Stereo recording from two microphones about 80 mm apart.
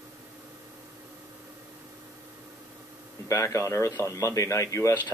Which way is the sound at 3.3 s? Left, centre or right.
Left.